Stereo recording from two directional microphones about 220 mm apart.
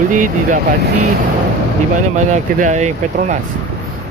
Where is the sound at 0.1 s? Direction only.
35° right (ahead or behind).